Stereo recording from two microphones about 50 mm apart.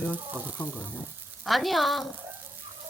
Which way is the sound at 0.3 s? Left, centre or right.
Right.